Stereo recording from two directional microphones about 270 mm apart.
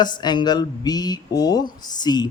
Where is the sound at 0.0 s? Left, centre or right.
Centre.